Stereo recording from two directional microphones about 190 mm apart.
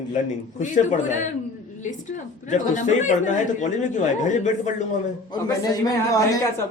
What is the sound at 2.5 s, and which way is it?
Speech, 40° left (ahead or behind).